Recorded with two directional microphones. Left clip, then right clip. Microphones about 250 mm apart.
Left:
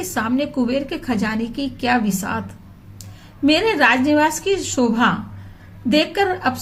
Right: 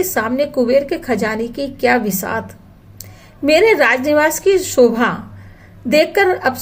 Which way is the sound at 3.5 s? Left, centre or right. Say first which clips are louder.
Right 5 dB; centre.